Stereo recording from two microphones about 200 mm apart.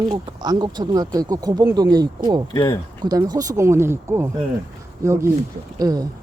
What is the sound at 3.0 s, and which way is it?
Speech, 20° right (ahead or behind).